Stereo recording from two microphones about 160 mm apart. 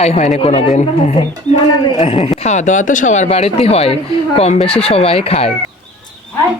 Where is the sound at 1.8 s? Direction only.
35° left (ahead or behind).